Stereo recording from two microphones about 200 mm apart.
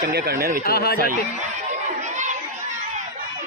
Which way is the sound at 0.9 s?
45° right (ahead or behind).